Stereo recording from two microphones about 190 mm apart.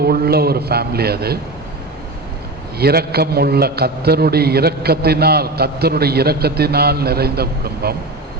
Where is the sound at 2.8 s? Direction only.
55° right (ahead or behind).